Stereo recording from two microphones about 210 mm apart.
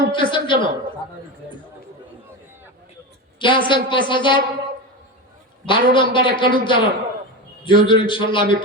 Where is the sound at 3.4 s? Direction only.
25° left (ahead or behind).